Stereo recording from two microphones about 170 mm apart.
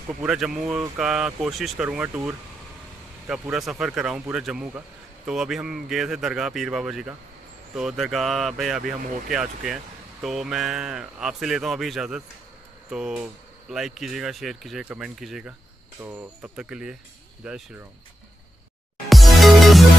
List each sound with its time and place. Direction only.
0.2 s speech: 5° right (ahead or behind)
8.8 s speech: 55° right (ahead or behind)
10.2 s speech: centre (ahead or behind)
16.0 s speech: 15° right (ahead or behind)
16.5 s speech: 5° right (ahead or behind)
19.0 s music: centre (ahead or behind)